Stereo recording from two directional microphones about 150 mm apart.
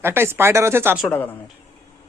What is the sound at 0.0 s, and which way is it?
Speech, 15° right (ahead or behind).